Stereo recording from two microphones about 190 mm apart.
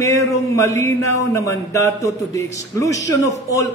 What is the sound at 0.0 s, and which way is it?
A man's voice, 15° left (ahead or behind).